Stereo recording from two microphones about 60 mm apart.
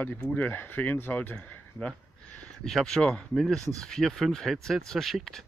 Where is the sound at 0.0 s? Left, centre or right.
Left.